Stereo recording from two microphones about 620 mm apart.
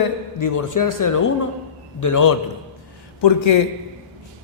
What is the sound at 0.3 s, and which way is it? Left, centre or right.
Speech, left.